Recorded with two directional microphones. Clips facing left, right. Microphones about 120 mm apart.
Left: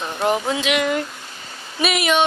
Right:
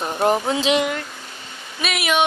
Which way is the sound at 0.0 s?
25° right (ahead or behind).